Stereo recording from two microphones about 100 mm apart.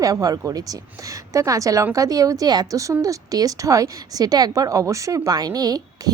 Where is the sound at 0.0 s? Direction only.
35° right (ahead or behind).